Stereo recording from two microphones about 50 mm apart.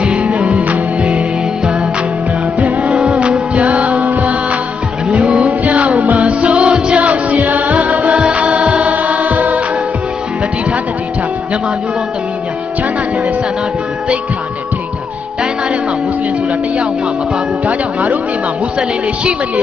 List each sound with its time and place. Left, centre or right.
0.0 s music: right
2.8 s music: centre
3.1 s music: right
8.9 s choir: right